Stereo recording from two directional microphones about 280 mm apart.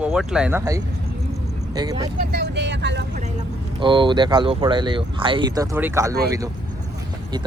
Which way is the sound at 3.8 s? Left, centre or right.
Centre.